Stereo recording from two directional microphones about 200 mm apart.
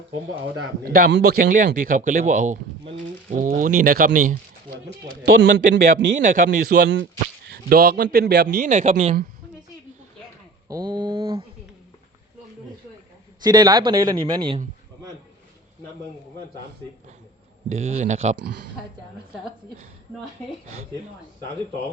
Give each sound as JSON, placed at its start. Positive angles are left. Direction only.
{"t": 1.1, "sound": "a man's voice", "side_deg": -50}
{"t": 5.2, "sound": "a man's voice", "side_deg": -60}
{"t": 6.2, "sound": "speech", "side_deg": -40}
{"t": 6.8, "sound": "speech", "side_deg": -70}
{"t": 7.4, "sound": "a man's voice", "side_deg": -50}
{"t": 10.7, "sound": "a man's voice", "side_deg": -20}
{"t": 13.4, "sound": "a man's voice", "side_deg": -20}
{"t": 17.7, "sound": "speech", "side_deg": -35}